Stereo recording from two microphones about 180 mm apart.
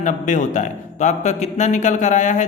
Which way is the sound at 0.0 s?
45° left (ahead or behind).